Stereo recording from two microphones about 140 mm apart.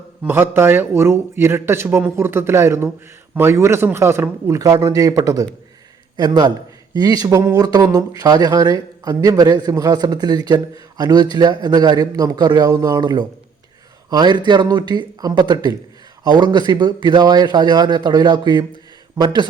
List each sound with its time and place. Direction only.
0.2 s a man's voice: 15° right (ahead or behind); by 18.6 s 30° right (ahead or behind)